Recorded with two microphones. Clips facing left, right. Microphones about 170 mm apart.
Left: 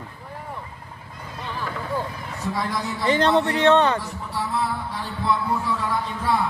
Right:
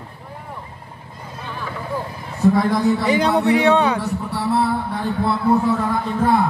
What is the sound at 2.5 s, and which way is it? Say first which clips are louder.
Speech: right 10 dB; 55° right (ahead or behind).